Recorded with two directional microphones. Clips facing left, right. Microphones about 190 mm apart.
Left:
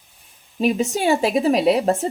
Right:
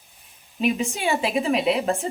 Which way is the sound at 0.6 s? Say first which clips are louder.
Left 4 dB; 35° left (ahead or behind).